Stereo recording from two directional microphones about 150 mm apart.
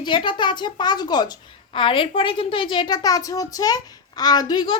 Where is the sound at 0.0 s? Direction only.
35° left (ahead or behind).